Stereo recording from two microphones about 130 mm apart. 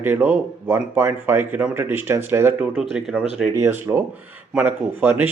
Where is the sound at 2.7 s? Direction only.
5° right (ahead or behind).